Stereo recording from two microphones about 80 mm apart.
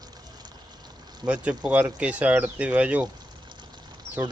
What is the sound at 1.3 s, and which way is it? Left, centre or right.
Speech, centre.